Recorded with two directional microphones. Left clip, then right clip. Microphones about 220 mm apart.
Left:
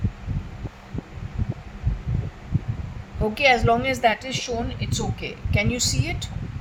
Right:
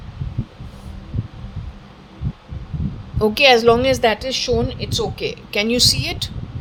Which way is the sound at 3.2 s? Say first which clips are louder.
Right 6 dB; 45° right (ahead or behind).